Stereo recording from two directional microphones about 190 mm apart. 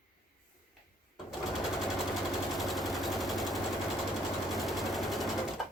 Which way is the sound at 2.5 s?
Centre (ahead or behind).